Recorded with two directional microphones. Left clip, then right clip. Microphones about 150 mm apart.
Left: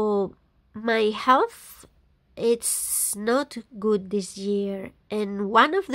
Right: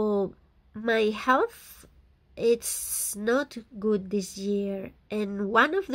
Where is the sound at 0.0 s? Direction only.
20° left (ahead or behind).